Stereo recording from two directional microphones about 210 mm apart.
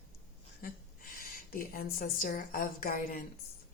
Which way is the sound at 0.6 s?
40° left (ahead or behind).